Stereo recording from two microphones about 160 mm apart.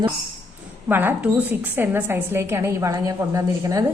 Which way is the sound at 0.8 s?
10° right (ahead or behind).